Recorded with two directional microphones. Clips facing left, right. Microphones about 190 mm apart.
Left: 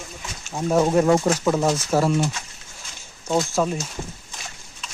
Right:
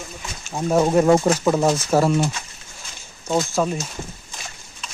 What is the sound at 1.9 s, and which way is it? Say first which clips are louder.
Speech: right 2 dB; 45° right (ahead or behind).